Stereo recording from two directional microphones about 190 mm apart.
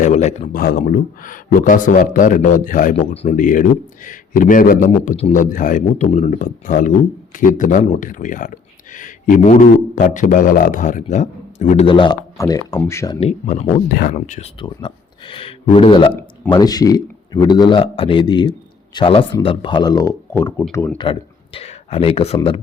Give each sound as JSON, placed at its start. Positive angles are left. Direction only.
{"t": 0.0, "sound": "a man's voice", "side_deg": 40}
{"t": 13.1, "sound": "a man's voice", "side_deg": 35}
{"t": 13.9, "sound": "speech", "side_deg": 50}
{"t": 14.2, "sound": "speech", "side_deg": 35}
{"t": 21.0, "sound": "speech", "side_deg": 25}